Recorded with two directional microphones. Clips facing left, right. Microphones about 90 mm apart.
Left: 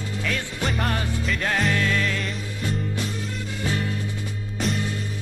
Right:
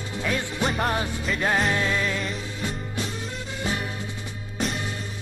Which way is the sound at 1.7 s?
20° right (ahead or behind).